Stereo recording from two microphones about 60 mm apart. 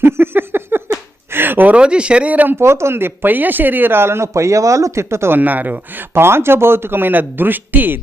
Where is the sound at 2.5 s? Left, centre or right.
Right.